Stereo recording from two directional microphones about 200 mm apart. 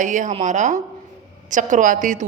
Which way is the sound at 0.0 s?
40° right (ahead or behind).